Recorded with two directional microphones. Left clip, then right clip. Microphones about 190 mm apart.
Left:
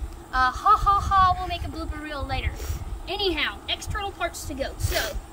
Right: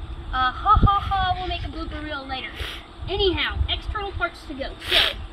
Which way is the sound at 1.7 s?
15° left (ahead or behind).